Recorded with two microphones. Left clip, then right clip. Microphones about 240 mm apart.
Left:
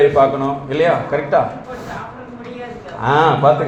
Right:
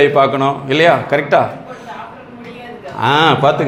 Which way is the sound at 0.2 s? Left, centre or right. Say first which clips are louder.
Right 2 dB; right.